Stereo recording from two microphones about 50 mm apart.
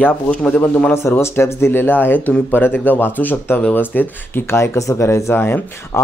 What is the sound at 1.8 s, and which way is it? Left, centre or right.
Speech, left.